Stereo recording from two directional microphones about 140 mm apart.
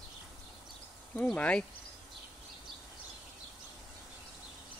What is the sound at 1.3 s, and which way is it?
Cricket, 10° left (ahead or behind).